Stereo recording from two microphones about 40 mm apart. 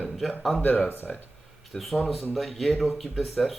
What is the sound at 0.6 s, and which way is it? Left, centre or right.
Speech, left.